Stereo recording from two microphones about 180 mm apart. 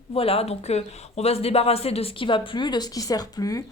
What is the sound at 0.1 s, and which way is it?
A woman's voice, 35° left (ahead or behind).